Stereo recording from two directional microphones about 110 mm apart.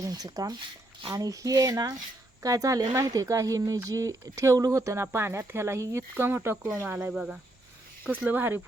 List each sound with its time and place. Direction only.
0.0 s speech: 35° right (ahead or behind); by 8.6 s 20° right (ahead or behind)